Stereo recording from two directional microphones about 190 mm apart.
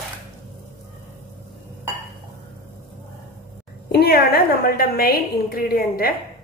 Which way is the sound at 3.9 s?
55° left (ahead or behind).